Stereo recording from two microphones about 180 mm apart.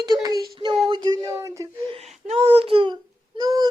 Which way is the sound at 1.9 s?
35° right (ahead or behind).